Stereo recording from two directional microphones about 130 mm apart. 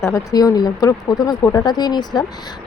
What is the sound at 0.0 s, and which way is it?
Speech, 25° left (ahead or behind).